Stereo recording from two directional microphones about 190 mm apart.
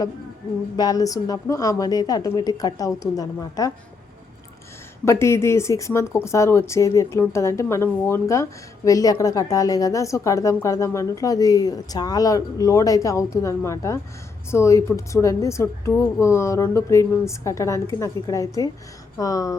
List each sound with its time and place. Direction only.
0.8 s a woman's voice: 20° left (ahead or behind)
5.0 s a woman's voice: 15° left (ahead or behind)